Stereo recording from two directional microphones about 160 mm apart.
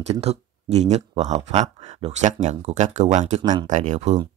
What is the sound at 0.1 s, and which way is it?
Speech, 40° right (ahead or behind).